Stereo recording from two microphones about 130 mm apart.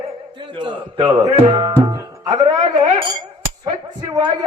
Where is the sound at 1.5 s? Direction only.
40° right (ahead or behind).